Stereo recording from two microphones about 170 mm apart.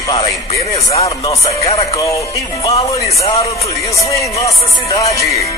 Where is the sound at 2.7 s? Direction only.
35° left (ahead or behind).